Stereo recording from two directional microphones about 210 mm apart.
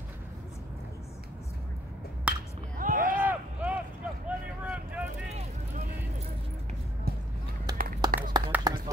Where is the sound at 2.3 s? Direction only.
5° right (ahead or behind).